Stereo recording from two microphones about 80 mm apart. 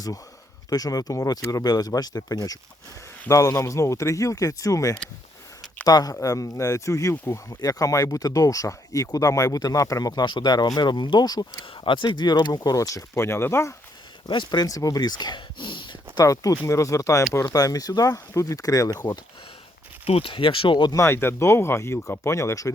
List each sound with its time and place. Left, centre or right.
0.7 s speech: left
1.6 s speech: left
3.2 s speech: left
7.5 s speech: left
10.2 s speech: left
13.1 s speech: left
14.3 s speech: left
14.7 s speech: left
16.1 s speech: left
20.3 s speech: left
20.9 s speech: left